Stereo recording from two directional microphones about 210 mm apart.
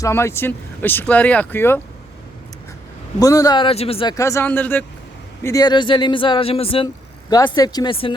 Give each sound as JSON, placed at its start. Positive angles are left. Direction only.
{"t": 0.0, "sound": "speech", "side_deg": 10}
{"t": 3.2, "sound": "speech", "side_deg": 15}
{"t": 4.2, "sound": "speech", "side_deg": 15}